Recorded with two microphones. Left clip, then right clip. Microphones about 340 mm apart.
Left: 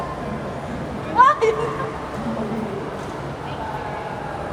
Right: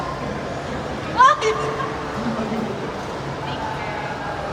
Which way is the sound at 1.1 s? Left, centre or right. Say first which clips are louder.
Even; left.